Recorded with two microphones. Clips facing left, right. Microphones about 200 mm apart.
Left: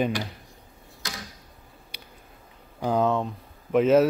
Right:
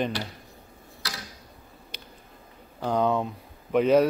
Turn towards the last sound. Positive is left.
turn(degrees=0)  # may be behind; listen again after turning